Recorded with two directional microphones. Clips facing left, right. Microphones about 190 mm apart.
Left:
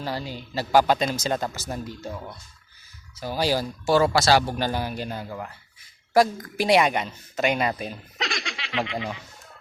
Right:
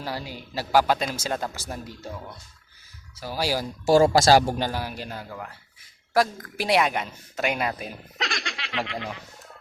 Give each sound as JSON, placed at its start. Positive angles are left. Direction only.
{"t": 0.0, "sound": "speech", "side_deg": -10}
{"t": 3.3, "sound": "speech", "side_deg": -10}
{"t": 3.8, "sound": "speech", "side_deg": -40}
{"t": 4.7, "sound": "a woman's voice", "side_deg": -5}